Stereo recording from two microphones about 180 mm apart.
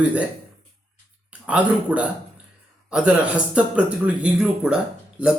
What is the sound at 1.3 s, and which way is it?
Speech, 5° right (ahead or behind).